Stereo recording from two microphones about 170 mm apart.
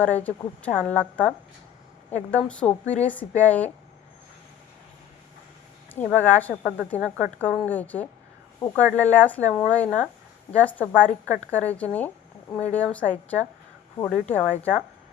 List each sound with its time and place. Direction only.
0.0 s a woman's voice: 10° left (ahead or behind)
5.9 s a woman's voice: 10° left (ahead or behind)